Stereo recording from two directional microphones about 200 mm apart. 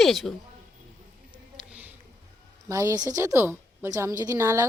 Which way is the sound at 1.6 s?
5° right (ahead or behind).